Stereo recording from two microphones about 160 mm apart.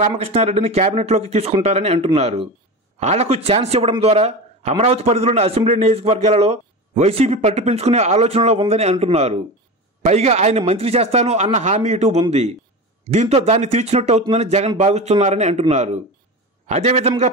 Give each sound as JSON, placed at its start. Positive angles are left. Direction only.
{"t": 0.2, "sound": "a man's voice", "side_deg": -40}